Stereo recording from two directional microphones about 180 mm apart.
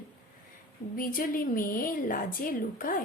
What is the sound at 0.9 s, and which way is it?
A woman's voice, 50° left (ahead or behind).